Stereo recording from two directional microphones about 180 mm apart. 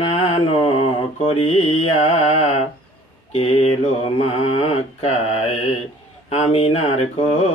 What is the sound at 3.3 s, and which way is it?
Mantra, 35° left (ahead or behind).